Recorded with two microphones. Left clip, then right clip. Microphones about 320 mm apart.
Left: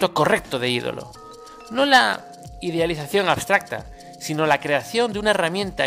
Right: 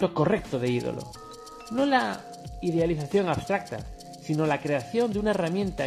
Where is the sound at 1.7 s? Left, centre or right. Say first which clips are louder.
Left 8 dB; left.